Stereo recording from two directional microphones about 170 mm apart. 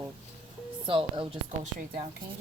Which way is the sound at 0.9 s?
30° right (ahead or behind).